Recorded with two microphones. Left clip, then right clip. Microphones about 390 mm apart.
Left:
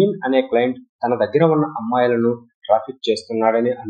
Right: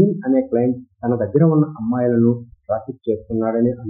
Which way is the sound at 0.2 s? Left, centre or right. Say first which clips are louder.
Left 1 dB; centre.